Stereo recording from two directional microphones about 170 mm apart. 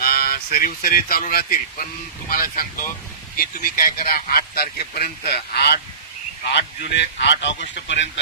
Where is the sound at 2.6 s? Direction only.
55° left (ahead or behind).